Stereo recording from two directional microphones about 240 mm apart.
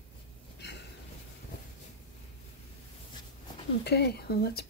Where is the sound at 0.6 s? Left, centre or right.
Left.